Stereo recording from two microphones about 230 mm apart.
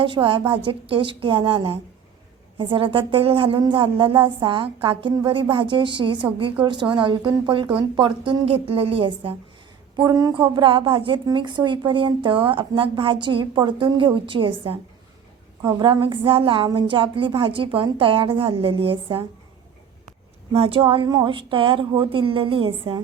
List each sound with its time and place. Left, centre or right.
0.0 s a woman's voice: right
20.5 s a woman's voice: right